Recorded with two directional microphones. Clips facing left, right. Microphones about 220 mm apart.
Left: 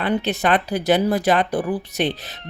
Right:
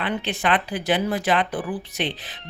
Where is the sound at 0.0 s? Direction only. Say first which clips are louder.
Left 5 dB; 40° left (ahead or behind).